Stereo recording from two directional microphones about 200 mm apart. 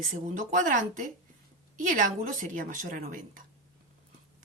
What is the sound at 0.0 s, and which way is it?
A woman's voice, 40° right (ahead or behind).